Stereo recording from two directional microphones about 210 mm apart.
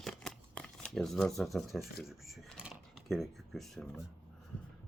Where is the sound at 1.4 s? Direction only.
Centre (ahead or behind).